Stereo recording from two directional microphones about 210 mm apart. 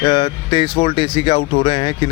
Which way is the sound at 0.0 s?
20° left (ahead or behind).